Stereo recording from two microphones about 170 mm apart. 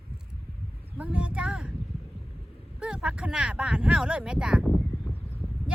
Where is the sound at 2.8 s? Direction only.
5° right (ahead or behind).